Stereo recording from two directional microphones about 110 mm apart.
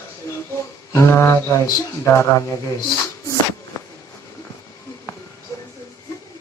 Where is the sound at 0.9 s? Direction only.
20° left (ahead or behind).